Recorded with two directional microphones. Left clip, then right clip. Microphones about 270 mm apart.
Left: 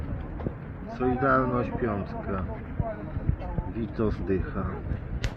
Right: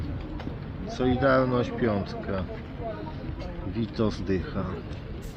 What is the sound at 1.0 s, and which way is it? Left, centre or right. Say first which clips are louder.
Speech: right 1 dB; centre.